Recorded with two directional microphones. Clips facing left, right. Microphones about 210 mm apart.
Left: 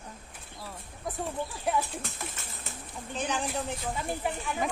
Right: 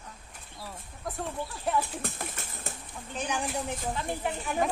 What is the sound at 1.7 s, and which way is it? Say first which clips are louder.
Speech: even; centre (ahead or behind).